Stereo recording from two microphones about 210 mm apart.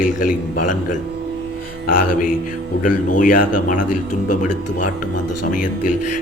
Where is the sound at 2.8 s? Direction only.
40° left (ahead or behind).